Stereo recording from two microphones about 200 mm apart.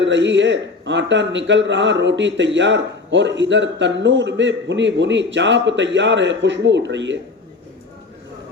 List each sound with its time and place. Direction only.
0.0 s a man's voice: 65° right (ahead or behind)